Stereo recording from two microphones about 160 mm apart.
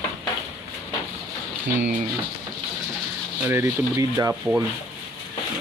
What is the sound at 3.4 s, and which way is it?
Speech, 15° right (ahead or behind).